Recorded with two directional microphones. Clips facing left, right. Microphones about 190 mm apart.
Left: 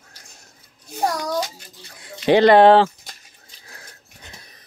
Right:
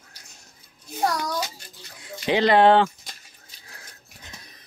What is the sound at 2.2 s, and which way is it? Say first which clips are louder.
Speech: left 6 dB; 55° left (ahead or behind).